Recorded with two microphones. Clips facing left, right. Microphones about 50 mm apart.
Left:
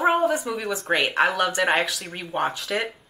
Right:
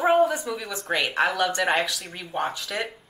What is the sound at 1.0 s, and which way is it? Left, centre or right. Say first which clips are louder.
Speech: even; centre.